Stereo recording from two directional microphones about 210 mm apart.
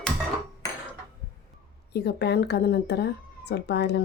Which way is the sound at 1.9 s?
50° left (ahead or behind).